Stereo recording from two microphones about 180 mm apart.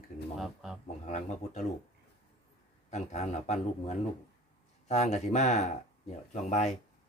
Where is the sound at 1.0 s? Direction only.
40° left (ahead or behind).